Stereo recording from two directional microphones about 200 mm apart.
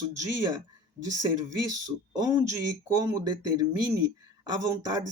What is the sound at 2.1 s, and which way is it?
Speech, 20° right (ahead or behind).